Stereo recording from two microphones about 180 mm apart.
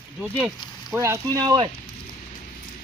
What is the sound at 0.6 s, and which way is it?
Frying, 25° left (ahead or behind).